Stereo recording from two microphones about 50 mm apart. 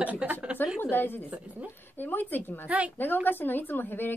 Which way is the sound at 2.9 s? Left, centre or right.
Left.